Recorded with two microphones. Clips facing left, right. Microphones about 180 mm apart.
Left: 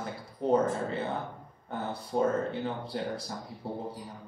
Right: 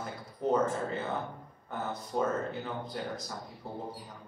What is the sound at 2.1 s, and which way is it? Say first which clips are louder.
Speech: left 4 dB; 30° left (ahead or behind).